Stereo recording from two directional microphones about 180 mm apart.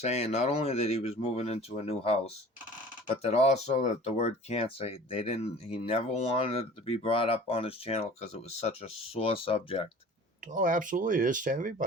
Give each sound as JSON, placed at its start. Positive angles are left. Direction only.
{"t": 0.0, "sound": "speech", "side_deg": 40}
{"t": 10.5, "sound": "speech", "side_deg": -50}